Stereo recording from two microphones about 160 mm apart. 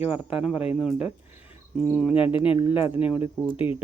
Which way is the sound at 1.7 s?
5° right (ahead or behind).